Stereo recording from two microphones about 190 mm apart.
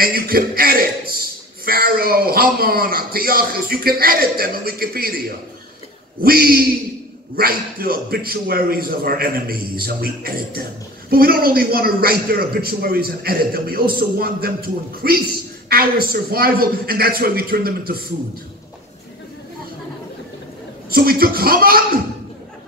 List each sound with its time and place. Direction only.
0.0 s a man's voice: 50° right (ahead or behind)
6.2 s a man's voice: 50° right (ahead or behind)
20.9 s a man's voice: 50° right (ahead or behind)